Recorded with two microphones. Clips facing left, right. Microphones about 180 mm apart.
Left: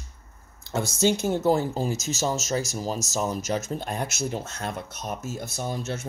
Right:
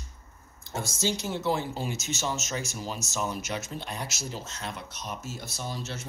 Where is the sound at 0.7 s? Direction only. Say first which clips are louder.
Left 7 dB; 65° left (ahead or behind).